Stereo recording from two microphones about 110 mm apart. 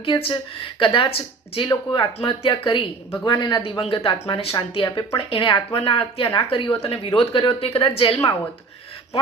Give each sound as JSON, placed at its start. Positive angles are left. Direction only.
{"t": 0.0, "sound": "speech", "side_deg": 55}
{"t": 3.8, "sound": "speech", "side_deg": 60}
{"t": 6.7, "sound": "speech", "side_deg": 65}